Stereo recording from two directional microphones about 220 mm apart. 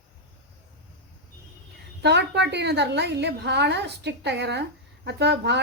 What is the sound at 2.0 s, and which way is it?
A woman's voice, 50° right (ahead or behind).